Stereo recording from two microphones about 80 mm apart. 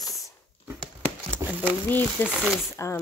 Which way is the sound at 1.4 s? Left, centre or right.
Right.